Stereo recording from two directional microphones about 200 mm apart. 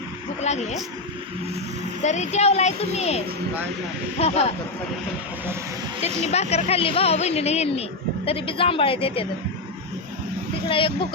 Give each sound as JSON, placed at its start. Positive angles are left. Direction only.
{"t": 0.4, "sound": "a child's voice", "side_deg": 35}
{"t": 2.0, "sound": "a child's voice", "side_deg": 35}
{"t": 6.2, "sound": "speech", "side_deg": 35}
{"t": 10.7, "sound": "speech", "side_deg": 25}